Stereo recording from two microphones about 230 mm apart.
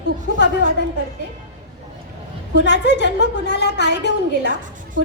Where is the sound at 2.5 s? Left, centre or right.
Left.